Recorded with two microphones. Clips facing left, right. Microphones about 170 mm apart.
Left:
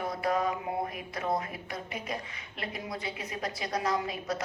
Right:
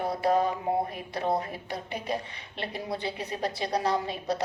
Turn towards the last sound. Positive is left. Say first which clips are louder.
# right 3 dB
turn(degrees=-30)  # may be behind; listen again after turning